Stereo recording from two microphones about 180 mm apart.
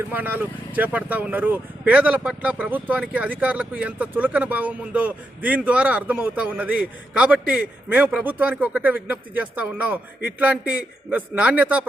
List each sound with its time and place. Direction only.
0.1 s speech: 10° right (ahead or behind)